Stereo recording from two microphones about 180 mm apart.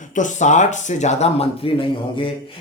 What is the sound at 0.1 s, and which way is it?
Speech, 45° left (ahead or behind).